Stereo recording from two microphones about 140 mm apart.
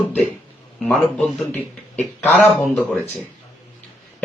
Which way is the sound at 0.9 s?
10° left (ahead or behind).